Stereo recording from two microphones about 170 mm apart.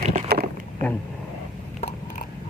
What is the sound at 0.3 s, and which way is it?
Rowboat, 65° right (ahead or behind).